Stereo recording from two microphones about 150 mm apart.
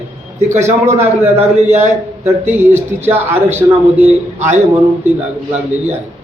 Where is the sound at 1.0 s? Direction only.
15° right (ahead or behind).